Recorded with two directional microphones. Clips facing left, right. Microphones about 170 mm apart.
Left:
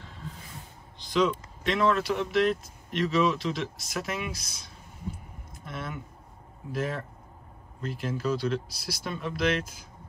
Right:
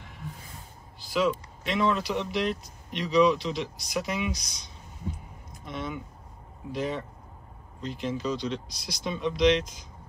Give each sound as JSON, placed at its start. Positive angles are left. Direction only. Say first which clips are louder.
{"t": 0.0, "sound": "a sound", "louder": "even", "side_deg": -15}
{"t": 1.1, "sound": "speech", "louder": "left 1 dB", "side_deg": 0}
{"t": 5.7, "sound": "speech", "louder": "right 3 dB", "side_deg": 0}